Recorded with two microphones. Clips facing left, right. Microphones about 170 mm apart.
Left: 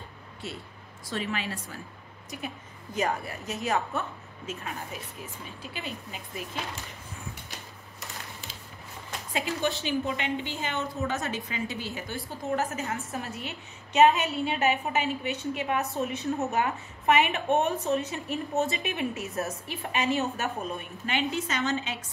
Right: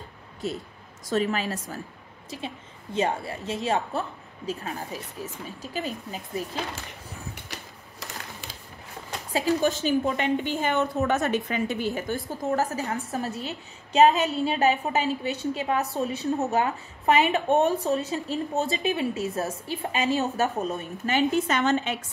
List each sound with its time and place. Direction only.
0.4 s speech: 40° right (ahead or behind)
2.3 s a woman's voice: 30° right (ahead or behind)
9.3 s a woman's voice: 40° right (ahead or behind)
12.3 s speech: 35° right (ahead or behind); by 21.9 s 60° right (ahead or behind)